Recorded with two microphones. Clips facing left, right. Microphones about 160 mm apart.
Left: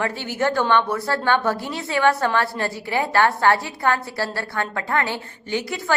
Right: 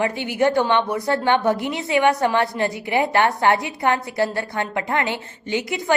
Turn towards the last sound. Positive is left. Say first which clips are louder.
# right 2 dB
turn(degrees=-20)  # may be behind; listen again after turning